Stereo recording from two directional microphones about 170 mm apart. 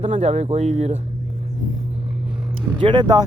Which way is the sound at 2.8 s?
25° right (ahead or behind).